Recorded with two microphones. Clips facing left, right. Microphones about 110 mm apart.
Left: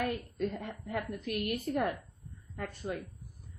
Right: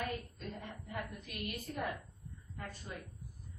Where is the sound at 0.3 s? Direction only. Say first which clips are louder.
Left 10 dB; 65° left (ahead or behind).